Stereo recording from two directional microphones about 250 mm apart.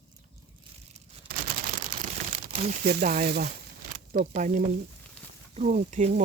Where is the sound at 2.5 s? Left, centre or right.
Right.